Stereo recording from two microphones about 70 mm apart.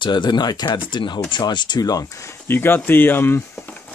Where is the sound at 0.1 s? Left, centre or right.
Left.